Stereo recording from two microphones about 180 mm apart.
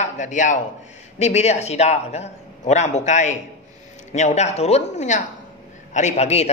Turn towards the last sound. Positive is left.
turn(degrees=35)  # may be behind; listen again after turning